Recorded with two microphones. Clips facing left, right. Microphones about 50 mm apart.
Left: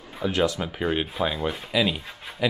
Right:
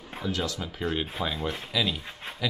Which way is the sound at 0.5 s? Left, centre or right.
Left.